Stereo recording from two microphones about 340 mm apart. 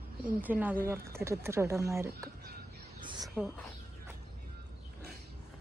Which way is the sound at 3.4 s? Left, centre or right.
Centre.